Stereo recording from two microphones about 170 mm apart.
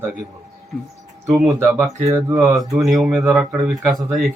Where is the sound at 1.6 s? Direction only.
15° right (ahead or behind).